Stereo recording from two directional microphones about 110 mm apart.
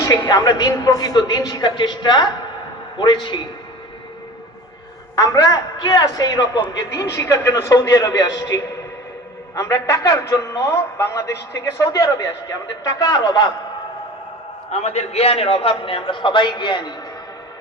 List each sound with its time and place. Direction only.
0.0 s a man's voice: 30° left (ahead or behind)
5.1 s a man's voice: 35° left (ahead or behind)
14.7 s a man's voice: 75° left (ahead or behind); by 16.9 s 45° left (ahead or behind)